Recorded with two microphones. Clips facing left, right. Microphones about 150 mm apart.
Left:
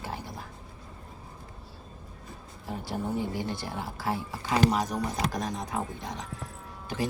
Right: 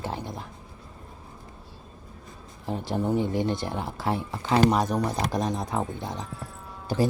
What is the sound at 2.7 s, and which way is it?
Speech, 25° right (ahead or behind).